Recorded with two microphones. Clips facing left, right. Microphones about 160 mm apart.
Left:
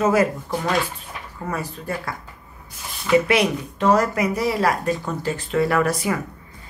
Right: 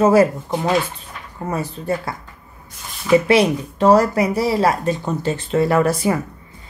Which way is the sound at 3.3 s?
35° right (ahead or behind).